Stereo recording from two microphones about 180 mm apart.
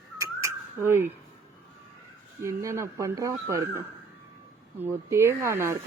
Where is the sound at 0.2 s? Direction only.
15° right (ahead or behind).